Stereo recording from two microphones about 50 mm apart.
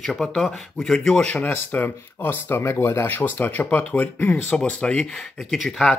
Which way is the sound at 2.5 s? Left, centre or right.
Left.